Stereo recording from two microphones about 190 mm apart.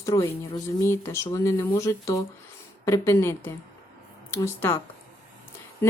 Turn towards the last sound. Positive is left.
turn(degrees=10)  # may be behind; listen again after turning